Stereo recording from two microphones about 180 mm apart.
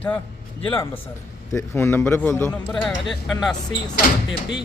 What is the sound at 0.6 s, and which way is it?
A man's voice, 10° left (ahead or behind).